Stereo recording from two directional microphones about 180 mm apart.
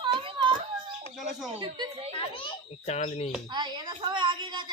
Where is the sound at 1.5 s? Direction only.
25° right (ahead or behind).